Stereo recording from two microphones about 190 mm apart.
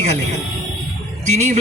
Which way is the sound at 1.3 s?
35° right (ahead or behind).